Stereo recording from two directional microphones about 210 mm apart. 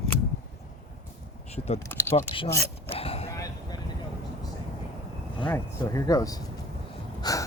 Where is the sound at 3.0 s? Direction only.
30° left (ahead or behind).